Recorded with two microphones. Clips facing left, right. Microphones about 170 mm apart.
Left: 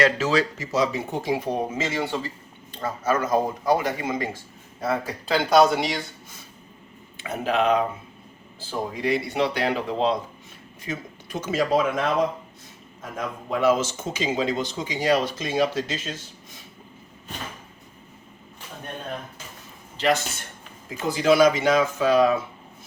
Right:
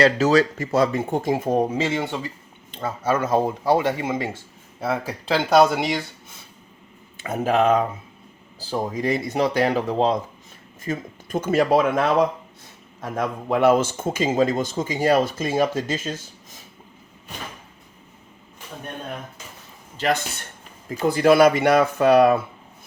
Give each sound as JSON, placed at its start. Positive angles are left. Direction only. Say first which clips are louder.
{"t": 0.0, "sound": "speech", "louder": "right 4 dB", "side_deg": -40}
{"t": 1.8, "sound": "speech", "louder": "right 2 dB", "side_deg": -20}
{"t": 4.8, "sound": "speech", "louder": "right 1 dB", "side_deg": 0}
{"t": 7.2, "sound": "speech", "louder": "right 4 dB", "side_deg": -45}
{"t": 21.1, "sound": "speech", "louder": "right 3 dB", "side_deg": -55}